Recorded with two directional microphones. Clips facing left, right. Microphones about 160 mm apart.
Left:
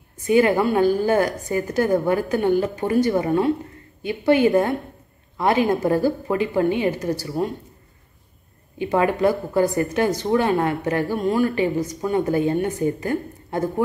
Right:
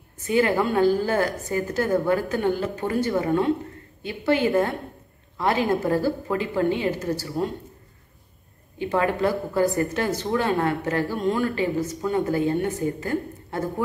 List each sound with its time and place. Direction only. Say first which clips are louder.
0.3 s speech: left 4 dB; 15° left (ahead or behind)
8.7 s speech: left 3 dB; 15° left (ahead or behind)